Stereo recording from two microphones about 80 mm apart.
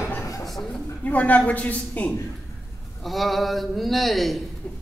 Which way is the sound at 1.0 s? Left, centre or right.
Centre.